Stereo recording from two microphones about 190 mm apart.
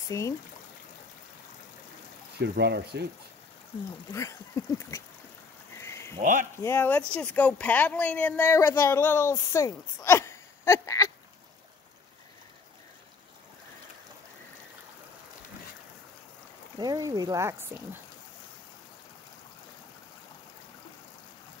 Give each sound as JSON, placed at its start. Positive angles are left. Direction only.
{"t": 0.1, "sound": "speech", "side_deg": 15}
{"t": 2.4, "sound": "speech", "side_deg": -60}
{"t": 4.1, "sound": "speech", "side_deg": 15}
{"t": 5.8, "sound": "a sound", "side_deg": 15}
{"t": 6.1, "sound": "speech", "side_deg": -40}
{"t": 6.6, "sound": "speech", "side_deg": 10}
{"t": 16.7, "sound": "speech", "side_deg": -20}